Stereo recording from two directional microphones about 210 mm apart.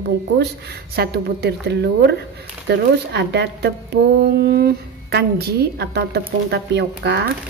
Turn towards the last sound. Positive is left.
turn(degrees=-55)  # may be behind; listen again after turning